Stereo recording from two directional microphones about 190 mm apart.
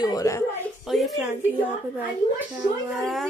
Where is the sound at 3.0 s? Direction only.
Centre (ahead or behind).